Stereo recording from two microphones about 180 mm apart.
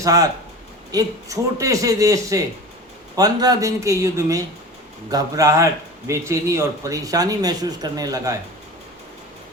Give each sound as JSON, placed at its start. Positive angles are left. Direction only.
{"t": 0.0, "sound": "a man's voice", "side_deg": -20}